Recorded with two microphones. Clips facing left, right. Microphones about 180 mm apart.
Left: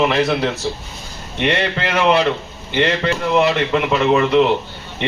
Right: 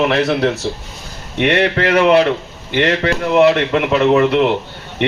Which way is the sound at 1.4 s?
65° right (ahead or behind).